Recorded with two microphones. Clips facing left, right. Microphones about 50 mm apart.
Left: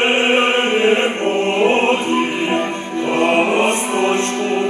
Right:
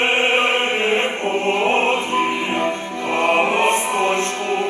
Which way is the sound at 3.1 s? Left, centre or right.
Left.